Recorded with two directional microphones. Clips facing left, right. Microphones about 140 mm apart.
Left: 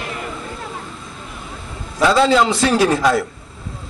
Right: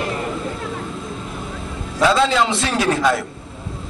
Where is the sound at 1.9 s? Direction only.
Centre (ahead or behind).